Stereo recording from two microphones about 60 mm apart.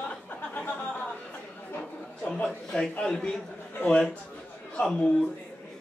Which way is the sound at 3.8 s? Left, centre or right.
Left.